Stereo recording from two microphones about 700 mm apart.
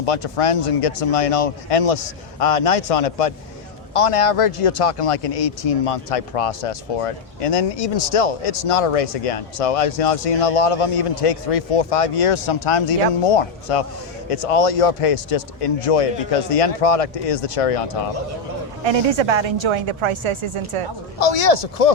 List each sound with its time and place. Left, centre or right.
0.0 s speech: left
18.9 s a woman's voice: right
21.2 s speech: left